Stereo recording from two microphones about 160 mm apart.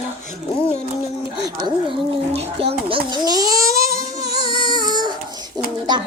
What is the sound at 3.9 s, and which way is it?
Music, 35° left (ahead or behind).